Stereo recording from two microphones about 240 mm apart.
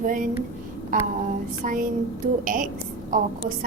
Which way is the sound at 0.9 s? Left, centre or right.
Right.